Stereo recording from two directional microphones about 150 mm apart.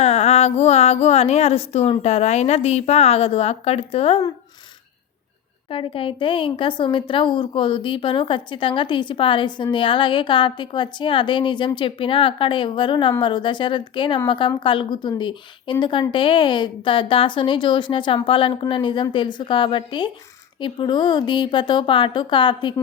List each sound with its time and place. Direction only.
0.0 s speech: 45° left (ahead or behind)
5.7 s a woman's voice: 35° left (ahead or behind)